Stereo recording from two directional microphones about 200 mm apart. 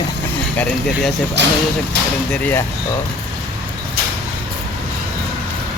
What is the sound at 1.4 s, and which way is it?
Speech, 60° right (ahead or behind).